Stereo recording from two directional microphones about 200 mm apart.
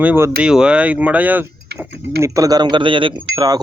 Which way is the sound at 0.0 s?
10° right (ahead or behind).